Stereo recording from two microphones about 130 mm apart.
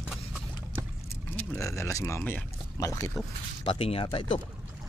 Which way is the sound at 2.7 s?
25° left (ahead or behind).